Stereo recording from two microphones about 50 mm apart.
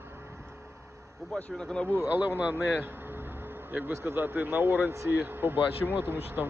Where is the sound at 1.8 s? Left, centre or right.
Right.